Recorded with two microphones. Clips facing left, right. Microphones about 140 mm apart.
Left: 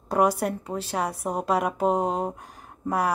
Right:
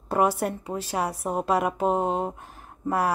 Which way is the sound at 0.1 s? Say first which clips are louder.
Left 1 dB; 5° right (ahead or behind).